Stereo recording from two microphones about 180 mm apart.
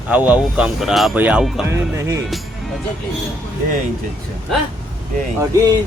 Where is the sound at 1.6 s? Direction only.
15° right (ahead or behind).